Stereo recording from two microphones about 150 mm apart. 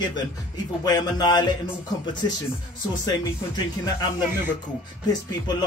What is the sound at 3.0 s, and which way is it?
Speech, 25° left (ahead or behind).